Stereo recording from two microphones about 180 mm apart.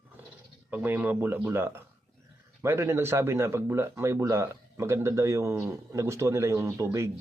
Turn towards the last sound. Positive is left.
turn(degrees=-15)  # may be behind; listen again after turning